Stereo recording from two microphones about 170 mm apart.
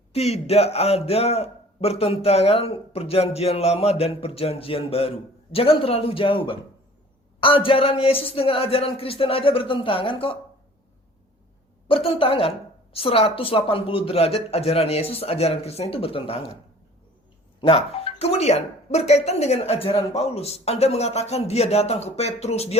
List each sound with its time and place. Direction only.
0.1 s a man's voice: 35° left (ahead or behind)
11.9 s a man's voice: 30° left (ahead or behind)
17.6 s a man's voice: 35° left (ahead or behind)